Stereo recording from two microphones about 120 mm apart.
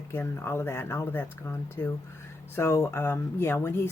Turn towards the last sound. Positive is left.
turn(degrees=20)  # may be behind; listen again after turning